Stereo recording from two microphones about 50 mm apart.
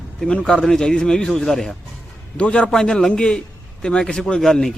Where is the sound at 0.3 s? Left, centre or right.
Centre.